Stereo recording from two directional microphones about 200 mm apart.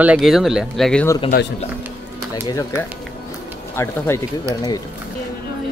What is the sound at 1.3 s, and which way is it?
Speech, 45° left (ahead or behind).